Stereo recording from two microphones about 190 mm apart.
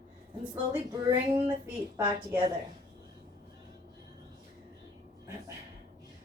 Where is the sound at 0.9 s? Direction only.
20° right (ahead or behind).